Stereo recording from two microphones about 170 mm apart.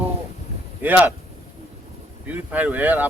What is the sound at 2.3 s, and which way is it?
Speech, 10° right (ahead or behind).